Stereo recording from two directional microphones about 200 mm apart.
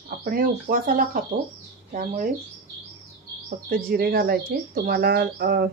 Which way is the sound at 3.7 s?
50° right (ahead or behind).